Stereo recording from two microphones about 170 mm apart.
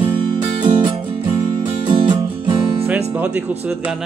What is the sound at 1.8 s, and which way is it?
Music, 30° right (ahead or behind).